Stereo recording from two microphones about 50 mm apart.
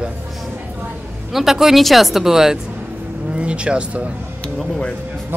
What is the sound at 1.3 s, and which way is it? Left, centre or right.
Speech, centre.